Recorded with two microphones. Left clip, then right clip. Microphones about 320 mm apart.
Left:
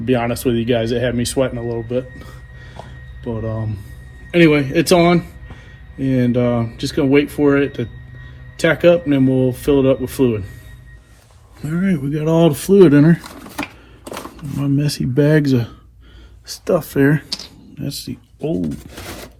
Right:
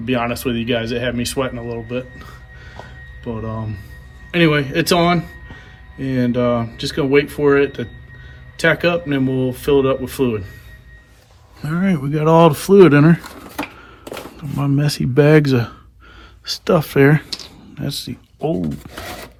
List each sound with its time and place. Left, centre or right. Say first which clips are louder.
0.0 s speech: left 2 dB; centre
3.2 s speech: left 2 dB; right
4.3 s speech: left 3 dB; centre
11.6 s speech: even; centre
14.8 s speech: right 3 dB; centre